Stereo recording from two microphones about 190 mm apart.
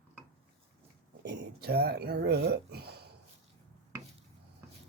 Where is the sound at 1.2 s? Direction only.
65° right (ahead or behind).